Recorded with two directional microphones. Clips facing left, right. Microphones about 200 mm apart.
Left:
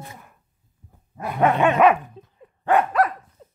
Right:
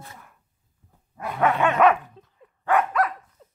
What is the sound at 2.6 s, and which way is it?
Dog, 30° left (ahead or behind).